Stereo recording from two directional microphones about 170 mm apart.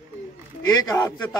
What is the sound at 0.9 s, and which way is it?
Speech, 20° left (ahead or behind).